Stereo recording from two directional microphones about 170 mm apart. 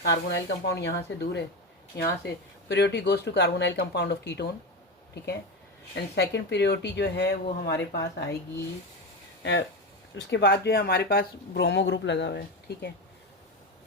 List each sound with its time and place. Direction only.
0.0 s speech: 85° left
2.6 s speech: 90° left
5.9 s speech: 90° left
9.4 s speech: 90° left
10.2 s speech: 80° left